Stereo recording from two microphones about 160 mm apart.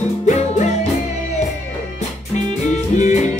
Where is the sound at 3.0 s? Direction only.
50° left (ahead or behind).